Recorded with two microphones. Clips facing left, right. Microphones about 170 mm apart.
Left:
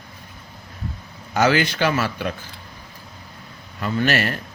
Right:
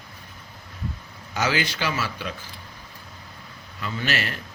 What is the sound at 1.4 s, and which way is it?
Speech, 55° left (ahead or behind).